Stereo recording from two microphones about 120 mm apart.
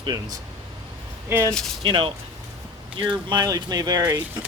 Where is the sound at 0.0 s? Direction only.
35° right (ahead or behind).